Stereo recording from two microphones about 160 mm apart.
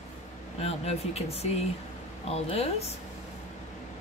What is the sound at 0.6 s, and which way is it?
A woman's voice, 40° left (ahead or behind).